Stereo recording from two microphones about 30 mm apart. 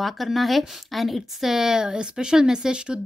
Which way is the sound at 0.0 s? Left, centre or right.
Centre.